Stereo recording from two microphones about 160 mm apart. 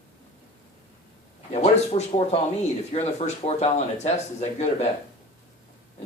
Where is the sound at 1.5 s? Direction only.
40° left (ahead or behind).